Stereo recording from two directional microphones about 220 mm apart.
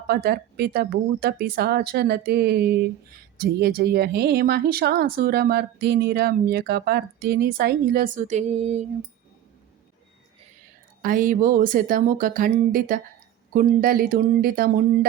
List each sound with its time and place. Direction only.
0.1 s speech: 45° right (ahead or behind)
11.0 s speech: 40° right (ahead or behind)